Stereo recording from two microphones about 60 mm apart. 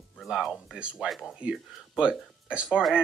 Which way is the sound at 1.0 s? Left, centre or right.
Centre.